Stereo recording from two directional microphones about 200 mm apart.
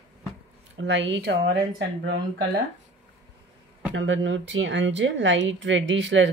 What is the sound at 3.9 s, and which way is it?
Speech, 70° right (ahead or behind).